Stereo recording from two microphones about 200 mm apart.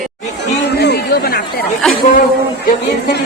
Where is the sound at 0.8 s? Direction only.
50° left (ahead or behind).